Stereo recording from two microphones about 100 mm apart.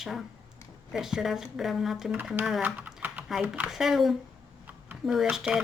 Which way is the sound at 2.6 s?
15° right (ahead or behind).